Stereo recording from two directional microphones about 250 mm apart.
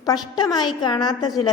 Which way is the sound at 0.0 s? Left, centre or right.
Centre.